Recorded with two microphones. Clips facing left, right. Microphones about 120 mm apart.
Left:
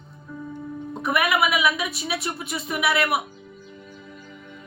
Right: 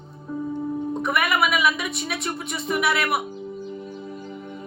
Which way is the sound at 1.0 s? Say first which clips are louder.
Left 2 dB; centre (ahead or behind).